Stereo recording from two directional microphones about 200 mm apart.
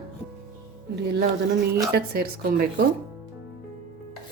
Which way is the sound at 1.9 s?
50° right (ahead or behind).